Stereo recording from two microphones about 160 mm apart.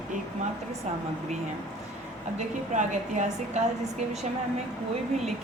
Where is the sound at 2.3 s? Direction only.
50° right (ahead or behind).